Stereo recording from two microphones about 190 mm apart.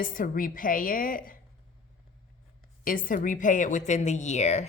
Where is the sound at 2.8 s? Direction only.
45° left (ahead or behind).